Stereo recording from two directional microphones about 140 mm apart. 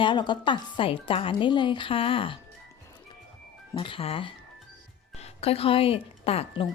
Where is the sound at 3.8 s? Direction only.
40° left (ahead or behind).